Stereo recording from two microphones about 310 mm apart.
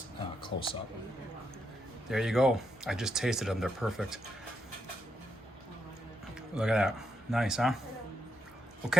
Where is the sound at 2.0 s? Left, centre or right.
Centre.